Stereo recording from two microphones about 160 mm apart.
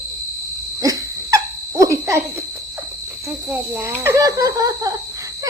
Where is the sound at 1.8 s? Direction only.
20° right (ahead or behind).